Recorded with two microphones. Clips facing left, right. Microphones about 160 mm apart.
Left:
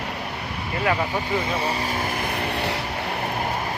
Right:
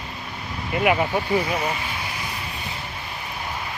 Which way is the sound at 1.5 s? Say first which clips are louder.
Left 2 dB; 35° left (ahead or behind).